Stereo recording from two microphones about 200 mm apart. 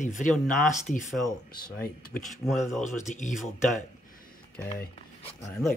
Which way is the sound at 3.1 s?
40° left (ahead or behind).